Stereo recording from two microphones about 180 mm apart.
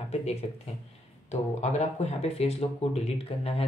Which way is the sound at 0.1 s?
35° left (ahead or behind).